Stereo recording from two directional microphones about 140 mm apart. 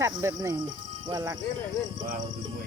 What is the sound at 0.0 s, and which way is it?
Speech, 20° right (ahead or behind).